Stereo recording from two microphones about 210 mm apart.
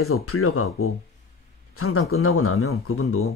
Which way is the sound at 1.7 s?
90° left.